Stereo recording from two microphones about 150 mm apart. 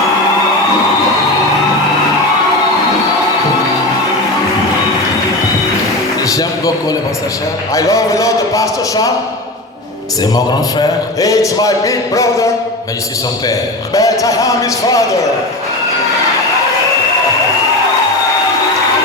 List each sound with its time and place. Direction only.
6.3 s a sound: 25° left (ahead or behind)
7.7 s a man's voice: 20° left (ahead or behind)
10.2 s a man's voice: 25° left (ahead or behind)
13.5 s a man's voice: 20° left (ahead or behind)